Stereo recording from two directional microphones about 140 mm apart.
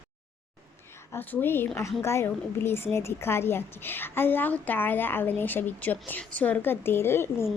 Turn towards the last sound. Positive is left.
turn(degrees=15)  # may be behind; listen again after turning